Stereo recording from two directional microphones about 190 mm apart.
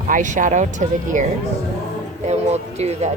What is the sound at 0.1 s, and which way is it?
Speech, 40° right (ahead or behind).